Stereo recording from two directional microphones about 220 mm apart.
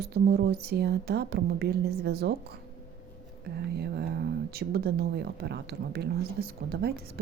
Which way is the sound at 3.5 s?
45° right (ahead or behind).